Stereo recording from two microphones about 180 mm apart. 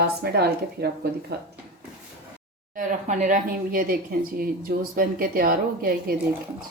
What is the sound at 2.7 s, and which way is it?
Speech, 45° right (ahead or behind).